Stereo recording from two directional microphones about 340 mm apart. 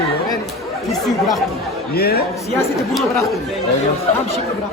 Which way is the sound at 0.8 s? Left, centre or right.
Centre.